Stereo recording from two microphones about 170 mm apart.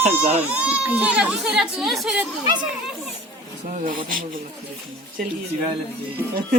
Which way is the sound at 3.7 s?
50° right (ahead or behind).